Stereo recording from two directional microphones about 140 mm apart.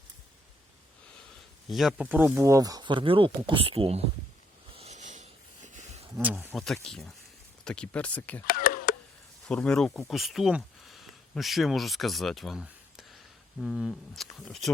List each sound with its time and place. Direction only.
1.7 s speech: 5° right (ahead or behind)
2.0 s speech: 15° right (ahead or behind); by 4.0 s 45° right (ahead or behind)
4.8 s a sound: 55° right (ahead or behind)
6.1 s speech: 10° right (ahead or behind)
6.5 s speech: centre (ahead or behind)
8.4 s a sound: 90° left
9.5 s speech: 5° left (ahead or behind)